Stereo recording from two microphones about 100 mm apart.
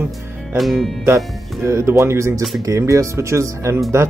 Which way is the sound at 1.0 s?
30° right (ahead or behind).